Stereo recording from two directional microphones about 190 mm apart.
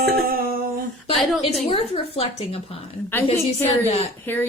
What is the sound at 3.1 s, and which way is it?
A woman's voice, 10° left (ahead or behind).